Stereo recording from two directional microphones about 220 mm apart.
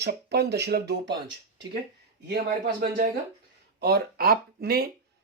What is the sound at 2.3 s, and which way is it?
Speech, 45° right (ahead or behind).